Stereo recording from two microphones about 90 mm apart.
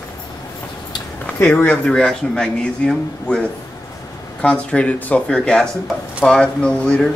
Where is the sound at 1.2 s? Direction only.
15° left (ahead or behind).